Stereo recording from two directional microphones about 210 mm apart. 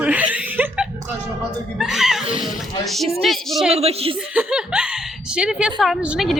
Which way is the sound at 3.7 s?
30° right (ahead or behind).